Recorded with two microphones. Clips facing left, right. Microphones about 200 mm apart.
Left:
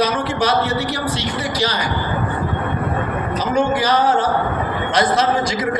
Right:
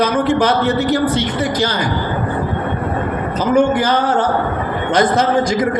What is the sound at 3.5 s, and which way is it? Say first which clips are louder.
A man's voice: right 3 dB; 55° right (ahead or behind).